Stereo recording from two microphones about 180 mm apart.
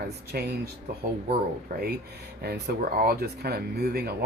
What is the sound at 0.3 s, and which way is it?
Speech, 60° right (ahead or behind).